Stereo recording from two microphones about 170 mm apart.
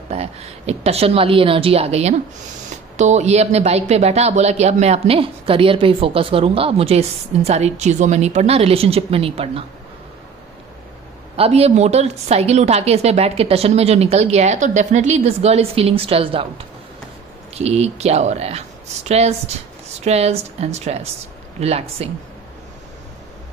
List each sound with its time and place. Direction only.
0.1 s speech: 40° right (ahead or behind)
11.3 s speech: 35° right (ahead or behind)